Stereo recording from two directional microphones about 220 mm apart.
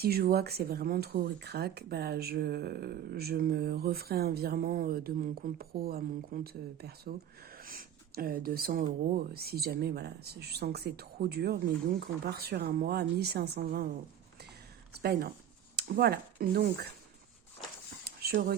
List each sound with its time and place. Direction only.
0.0 s speech: 45° right (ahead or behind)
15.7 s speech: 45° right (ahead or behind)
18.0 s dog: 45° right (ahead or behind)